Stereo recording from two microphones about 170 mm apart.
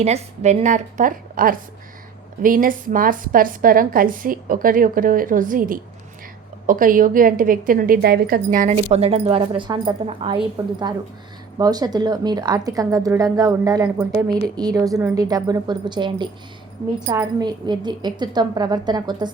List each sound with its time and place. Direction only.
0.0 s a woman's voice: 40° right (ahead or behind); by 8.4 s 65° right (ahead or behind)
8.7 s a woman's voice: 35° right (ahead or behind)